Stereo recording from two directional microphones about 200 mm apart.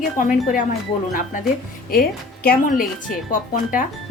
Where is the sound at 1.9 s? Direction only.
50° left (ahead or behind).